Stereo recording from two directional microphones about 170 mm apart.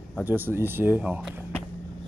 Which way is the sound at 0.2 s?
10° right (ahead or behind).